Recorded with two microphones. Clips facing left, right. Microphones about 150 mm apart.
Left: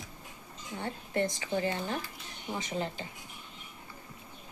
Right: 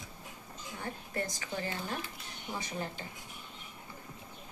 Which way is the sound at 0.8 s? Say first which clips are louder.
Left 6 dB; 25° left (ahead or behind).